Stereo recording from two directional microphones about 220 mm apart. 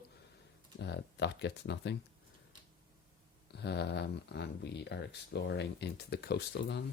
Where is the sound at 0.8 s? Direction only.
50° left (ahead or behind).